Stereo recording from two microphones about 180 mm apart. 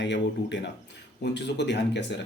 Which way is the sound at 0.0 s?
80° left.